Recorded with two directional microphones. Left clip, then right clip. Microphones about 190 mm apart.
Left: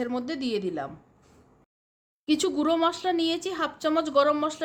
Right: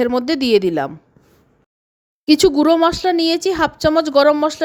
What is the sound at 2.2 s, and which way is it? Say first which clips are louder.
Speech: right 13 dB; 35° right (ahead or behind).